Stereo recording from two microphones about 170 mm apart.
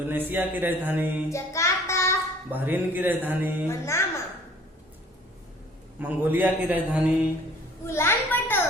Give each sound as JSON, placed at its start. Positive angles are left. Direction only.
{"t": 0.1, "sound": "speech", "side_deg": -10}
{"t": 1.3, "sound": "child singing", "side_deg": 15}
{"t": 2.5, "sound": "speech", "side_deg": -10}
{"t": 3.7, "sound": "a child's voice", "side_deg": 15}
{"t": 6.0, "sound": "speech", "side_deg": -10}
{"t": 7.9, "sound": "a child's voice", "side_deg": 15}